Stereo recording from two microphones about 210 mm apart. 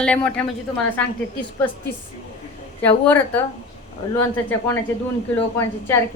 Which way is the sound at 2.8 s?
10° left (ahead or behind).